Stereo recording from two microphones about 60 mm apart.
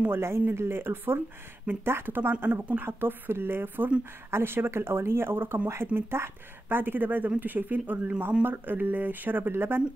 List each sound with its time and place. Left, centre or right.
0.1 s speech: right